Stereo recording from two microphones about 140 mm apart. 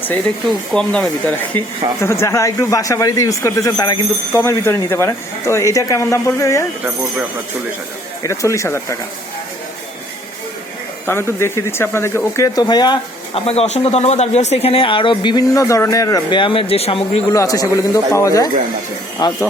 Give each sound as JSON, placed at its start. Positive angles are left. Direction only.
{"t": 0.7, "sound": "speech", "side_deg": 5}
{"t": 1.5, "sound": "speech", "side_deg": 20}
{"t": 8.2, "sound": "speech", "side_deg": 20}
{"t": 11.0, "sound": "speech", "side_deg": 15}
{"t": 12.6, "sound": "speech", "side_deg": 30}
{"t": 13.4, "sound": "speech", "side_deg": 45}
{"t": 17.3, "sound": "speech", "side_deg": 25}